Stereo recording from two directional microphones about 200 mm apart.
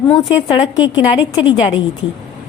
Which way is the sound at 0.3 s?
25° left (ahead or behind).